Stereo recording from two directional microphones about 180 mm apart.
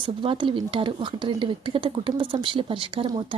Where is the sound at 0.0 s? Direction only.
30° right (ahead or behind).